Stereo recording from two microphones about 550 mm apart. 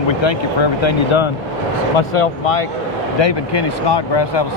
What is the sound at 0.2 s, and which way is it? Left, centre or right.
Speech, left.